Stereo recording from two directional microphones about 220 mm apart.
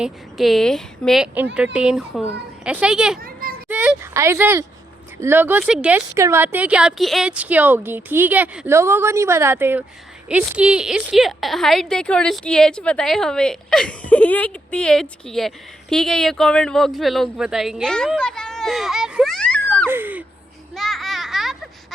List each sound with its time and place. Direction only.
0.0 s a woman's voice: centre (ahead or behind)
3.2 s children playing: 40° right (ahead or behind)
3.7 s a woman's voice: 5° right (ahead or behind)
19.9 s speech: 10° right (ahead or behind)
20.7 s children playing: centre (ahead or behind)